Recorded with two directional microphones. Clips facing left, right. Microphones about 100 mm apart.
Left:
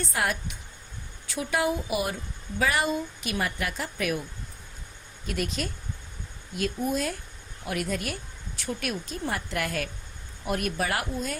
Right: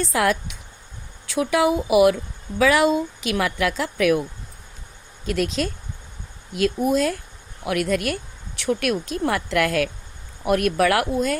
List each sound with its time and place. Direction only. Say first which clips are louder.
0.0 s speech: right 8 dB; 90° right
5.2 s speech: right 8 dB; 90° right